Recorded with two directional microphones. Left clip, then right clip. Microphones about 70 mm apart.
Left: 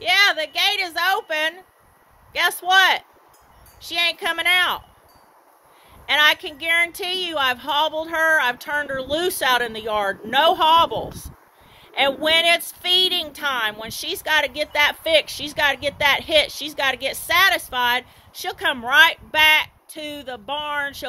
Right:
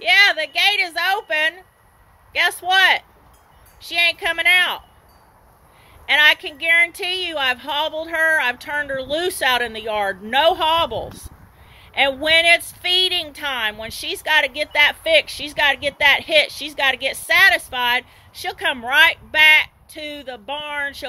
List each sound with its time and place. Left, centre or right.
0.0 s a sound: left
2.3 s speech: left
6.0 s speech: left